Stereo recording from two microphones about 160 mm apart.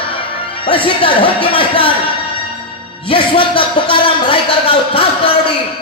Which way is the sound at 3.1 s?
30° left (ahead or behind).